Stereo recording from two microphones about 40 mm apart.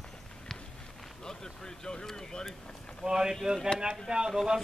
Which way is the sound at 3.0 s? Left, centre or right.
Centre.